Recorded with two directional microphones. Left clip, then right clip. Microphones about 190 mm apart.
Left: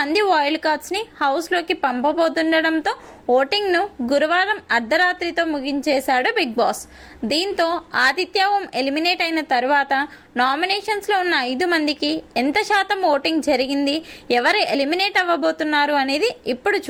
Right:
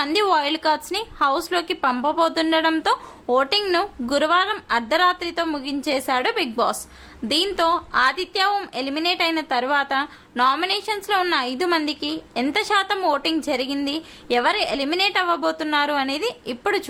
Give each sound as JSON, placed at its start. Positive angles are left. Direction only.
{"t": 0.0, "sound": "a woman's voice", "side_deg": 10}